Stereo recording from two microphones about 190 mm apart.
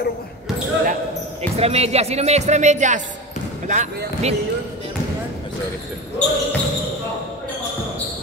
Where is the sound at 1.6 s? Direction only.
35° right (ahead or behind).